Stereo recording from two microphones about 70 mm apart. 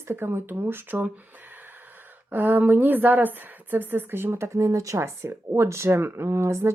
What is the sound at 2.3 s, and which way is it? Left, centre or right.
A woman's voice, right.